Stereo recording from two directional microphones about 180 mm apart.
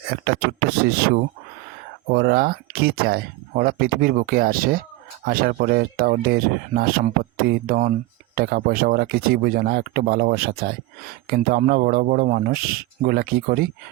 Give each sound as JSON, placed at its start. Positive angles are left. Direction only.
{"t": 0.1, "sound": "a man's voice", "side_deg": -60}